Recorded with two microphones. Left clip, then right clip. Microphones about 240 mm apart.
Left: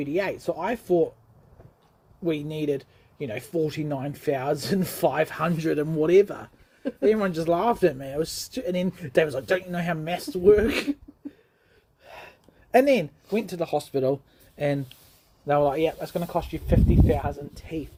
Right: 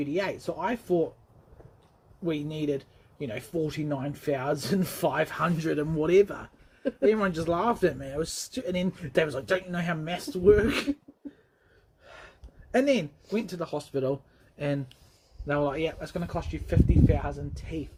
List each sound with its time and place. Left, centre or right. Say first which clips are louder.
0.0 s speech: left 3 dB; left
2.2 s speech: left 3 dB; left
12.0 s a sound: left 5 dB; left
12.7 s speech: left 5 dB; left